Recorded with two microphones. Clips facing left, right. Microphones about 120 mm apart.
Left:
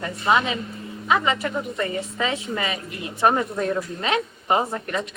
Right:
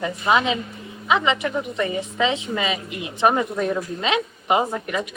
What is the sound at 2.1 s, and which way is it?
Speech, 25° right (ahead or behind).